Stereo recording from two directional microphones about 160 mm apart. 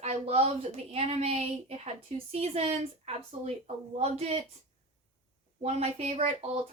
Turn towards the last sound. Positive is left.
turn(degrees=-40)  # may be behind; listen again after turning